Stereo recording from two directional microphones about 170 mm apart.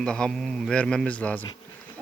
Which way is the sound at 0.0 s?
5° left (ahead or behind).